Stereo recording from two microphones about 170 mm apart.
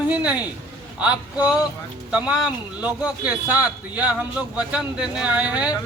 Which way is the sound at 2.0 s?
5° right (ahead or behind).